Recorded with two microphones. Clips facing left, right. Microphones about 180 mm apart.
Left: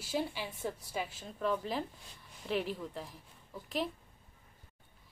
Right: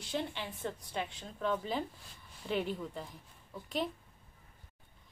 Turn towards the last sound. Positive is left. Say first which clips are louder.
# even
turn(degrees=0)  # may be behind; listen again after turning